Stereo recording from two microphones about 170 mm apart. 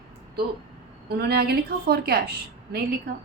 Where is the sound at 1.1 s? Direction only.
70° right (ahead or behind).